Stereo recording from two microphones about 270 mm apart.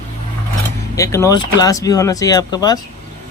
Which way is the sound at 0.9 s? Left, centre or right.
Centre.